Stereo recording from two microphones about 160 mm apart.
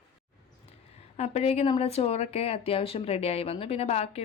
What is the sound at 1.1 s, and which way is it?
Speech, 40° left (ahead or behind).